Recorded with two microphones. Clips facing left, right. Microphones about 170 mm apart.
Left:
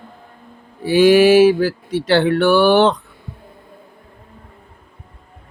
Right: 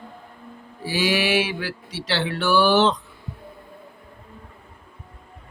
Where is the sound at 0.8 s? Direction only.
55° left (ahead or behind).